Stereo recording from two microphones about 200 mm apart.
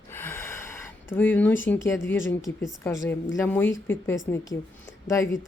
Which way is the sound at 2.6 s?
15° left (ahead or behind).